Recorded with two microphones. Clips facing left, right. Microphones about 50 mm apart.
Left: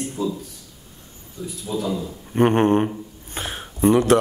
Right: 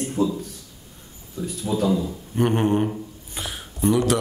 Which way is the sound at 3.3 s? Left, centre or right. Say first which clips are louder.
Left 5 dB; left.